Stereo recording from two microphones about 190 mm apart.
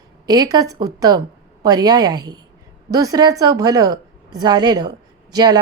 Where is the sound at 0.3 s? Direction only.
20° right (ahead or behind).